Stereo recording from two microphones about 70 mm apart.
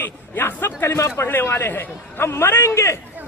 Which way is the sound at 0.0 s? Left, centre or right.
Left.